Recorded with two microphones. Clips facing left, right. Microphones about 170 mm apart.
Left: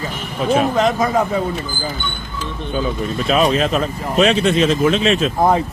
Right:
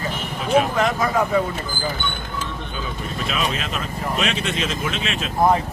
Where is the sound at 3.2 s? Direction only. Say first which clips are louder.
Left 11 dB; 35° left (ahead or behind).